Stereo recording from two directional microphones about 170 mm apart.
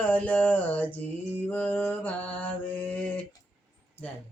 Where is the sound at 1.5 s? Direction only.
10° left (ahead or behind).